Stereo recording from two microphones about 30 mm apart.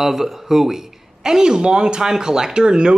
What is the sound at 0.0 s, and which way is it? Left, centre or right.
Speech, centre.